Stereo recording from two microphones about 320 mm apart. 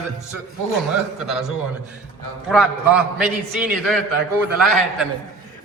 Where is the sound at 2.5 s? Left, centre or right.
Centre.